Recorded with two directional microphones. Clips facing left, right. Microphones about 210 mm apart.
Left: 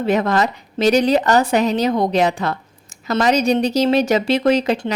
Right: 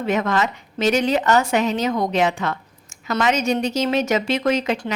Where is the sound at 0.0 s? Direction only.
35° left (ahead or behind).